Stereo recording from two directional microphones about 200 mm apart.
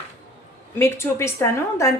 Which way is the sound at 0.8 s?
10° left (ahead or behind).